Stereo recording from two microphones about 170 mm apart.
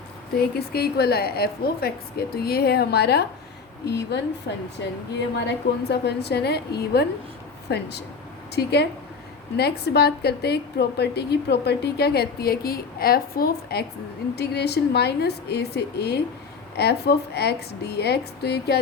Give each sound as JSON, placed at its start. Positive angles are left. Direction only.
{"t": 0.3, "sound": "a woman's voice", "side_deg": 70}
{"t": 5.5, "sound": "a woman's voice", "side_deg": 75}
{"t": 14.3, "sound": "a woman's voice", "side_deg": 75}